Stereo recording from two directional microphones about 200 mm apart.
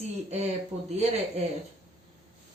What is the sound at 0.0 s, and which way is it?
Speech, 35° right (ahead or behind).